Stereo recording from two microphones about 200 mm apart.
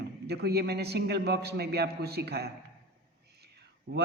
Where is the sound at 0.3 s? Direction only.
55° right (ahead or behind).